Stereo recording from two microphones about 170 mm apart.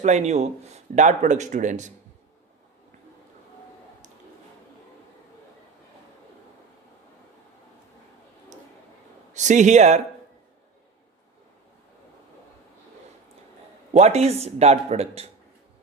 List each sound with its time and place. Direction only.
0.0 s speech: 40° right (ahead or behind)
9.3 s speech: 45° right (ahead or behind)
13.9 s speech: 40° right (ahead or behind)